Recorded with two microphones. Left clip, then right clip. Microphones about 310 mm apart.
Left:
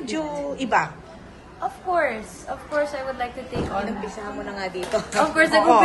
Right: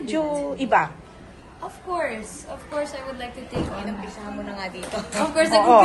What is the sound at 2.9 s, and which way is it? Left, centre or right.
Speech, centre.